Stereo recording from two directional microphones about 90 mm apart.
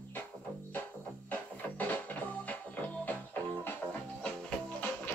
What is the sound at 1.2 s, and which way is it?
Music, 15° left (ahead or behind).